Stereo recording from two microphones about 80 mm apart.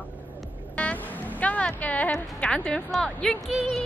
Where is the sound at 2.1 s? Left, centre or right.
Centre.